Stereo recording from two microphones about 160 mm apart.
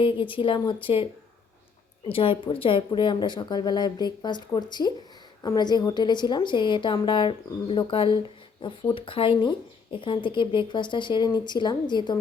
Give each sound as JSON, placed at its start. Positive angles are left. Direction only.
{"t": 0.0, "sound": "speech", "side_deg": 30}
{"t": 2.1, "sound": "a woman's voice", "side_deg": 35}